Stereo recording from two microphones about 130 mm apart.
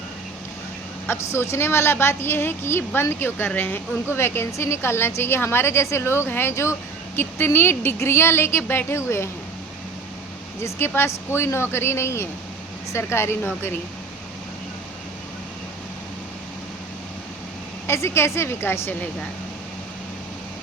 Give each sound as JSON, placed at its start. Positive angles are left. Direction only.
{"t": 1.0, "sound": "a woman's voice", "side_deg": 15}
{"t": 10.6, "sound": "a woman's voice", "side_deg": 15}
{"t": 17.8, "sound": "a woman's voice", "side_deg": 20}